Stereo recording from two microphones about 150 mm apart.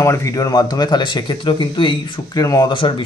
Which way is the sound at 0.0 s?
20° left (ahead or behind).